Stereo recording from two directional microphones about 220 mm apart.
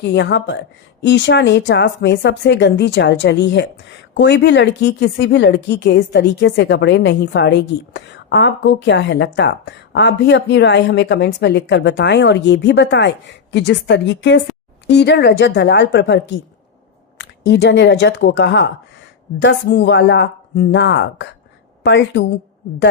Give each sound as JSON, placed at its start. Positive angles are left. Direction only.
{"t": 0.0, "sound": "speech", "side_deg": 50}